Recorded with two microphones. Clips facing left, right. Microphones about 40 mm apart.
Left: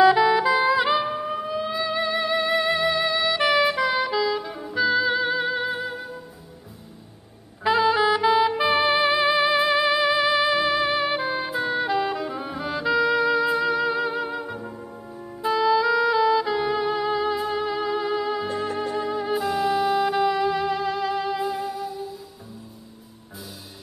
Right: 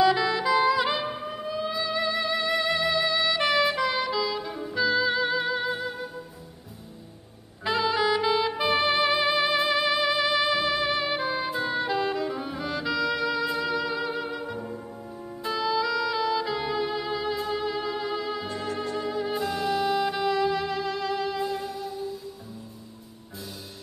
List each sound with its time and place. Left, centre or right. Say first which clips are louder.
0.0 s music: left 6 dB; centre
7.6 s saxophone: left 5 dB; centre
8.8 s music: left 3 dB; centre
15.6 s music: left 6 dB; centre
19.2 s music: left 6 dB; centre